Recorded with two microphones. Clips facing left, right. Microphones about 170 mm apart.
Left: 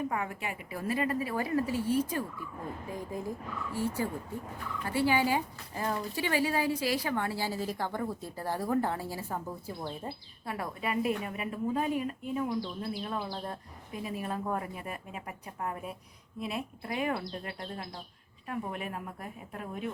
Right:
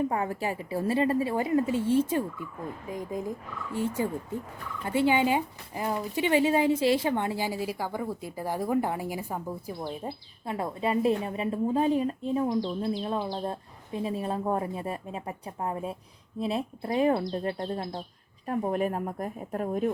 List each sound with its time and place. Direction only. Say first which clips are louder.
0.1 s speech: right 6 dB; 35° right (ahead or behind); by 10.5 s 15° right (ahead or behind)
10.5 s speech: right 5 dB; 25° right (ahead or behind); by 19.9 s 45° right (ahead or behind)